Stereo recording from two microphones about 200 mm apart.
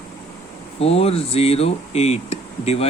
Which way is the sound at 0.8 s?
30° left (ahead or behind).